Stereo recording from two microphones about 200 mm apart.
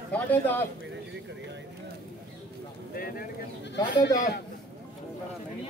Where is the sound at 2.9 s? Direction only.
45° left (ahead or behind).